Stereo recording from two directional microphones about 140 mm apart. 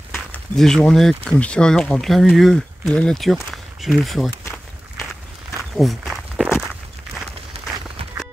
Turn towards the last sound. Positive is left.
turn(degrees=-45)  # may be behind; listen again after turning